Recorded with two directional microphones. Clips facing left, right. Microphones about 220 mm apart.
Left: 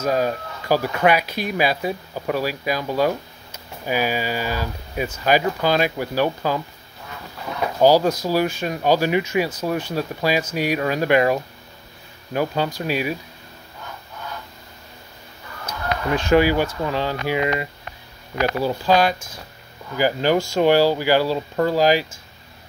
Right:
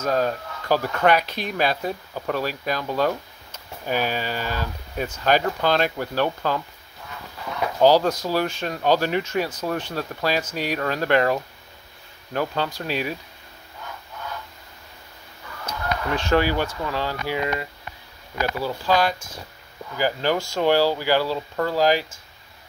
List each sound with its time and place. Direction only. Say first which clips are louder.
0.0 s speech: left 2 dB; 10° left (ahead or behind)
7.8 s speech: left 2 dB; 10° left (ahead or behind)
16.1 s speech: left 5 dB; 15° left (ahead or behind)